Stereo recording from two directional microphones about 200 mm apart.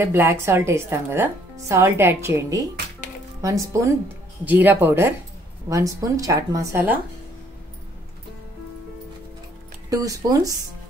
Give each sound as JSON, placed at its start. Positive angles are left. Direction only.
{"t": 0.0, "sound": "speech", "side_deg": -10}
{"t": 9.8, "sound": "speech", "side_deg": -15}